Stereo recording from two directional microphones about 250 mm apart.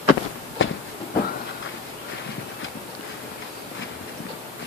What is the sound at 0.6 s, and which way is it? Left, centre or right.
Train, left.